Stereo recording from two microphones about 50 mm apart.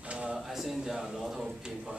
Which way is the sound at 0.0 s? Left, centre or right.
Right.